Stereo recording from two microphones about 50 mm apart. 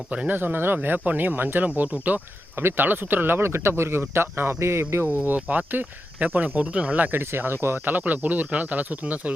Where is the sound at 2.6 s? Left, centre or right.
Right.